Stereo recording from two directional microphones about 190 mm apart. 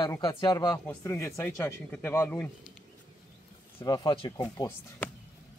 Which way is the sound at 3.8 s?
20° left (ahead or behind).